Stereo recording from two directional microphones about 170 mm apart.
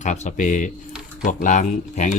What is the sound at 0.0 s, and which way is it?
Speech, 45° left (ahead or behind).